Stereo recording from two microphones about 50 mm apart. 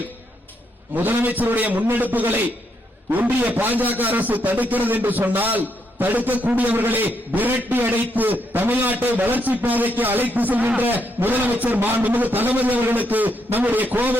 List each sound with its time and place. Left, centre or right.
0.9 s a man's voice: right